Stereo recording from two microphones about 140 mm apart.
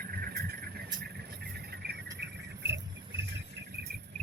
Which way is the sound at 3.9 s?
90° right.